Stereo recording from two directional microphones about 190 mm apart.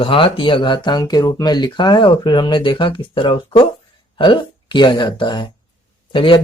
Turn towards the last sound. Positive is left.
turn(degrees=25)  # may be behind; listen again after turning